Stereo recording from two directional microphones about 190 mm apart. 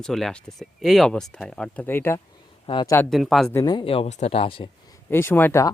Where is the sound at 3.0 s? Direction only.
Centre (ahead or behind).